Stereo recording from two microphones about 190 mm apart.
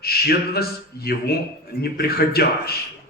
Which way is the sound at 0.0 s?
55° left (ahead or behind).